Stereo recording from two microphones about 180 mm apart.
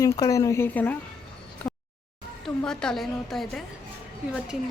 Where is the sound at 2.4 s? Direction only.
5° left (ahead or behind).